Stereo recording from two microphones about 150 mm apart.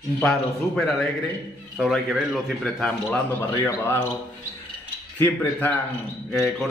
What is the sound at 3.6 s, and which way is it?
Speech, 15° left (ahead or behind).